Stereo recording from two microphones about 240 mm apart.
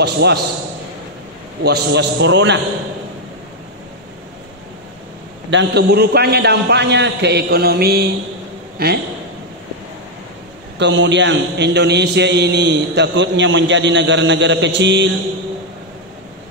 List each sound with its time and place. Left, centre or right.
0.0 s a man's voice: right
1.6 s a man's voice: right
5.5 s a man's voice: right
10.8 s a man's voice: right